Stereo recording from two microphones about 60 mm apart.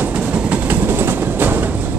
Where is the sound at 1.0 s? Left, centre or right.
Right.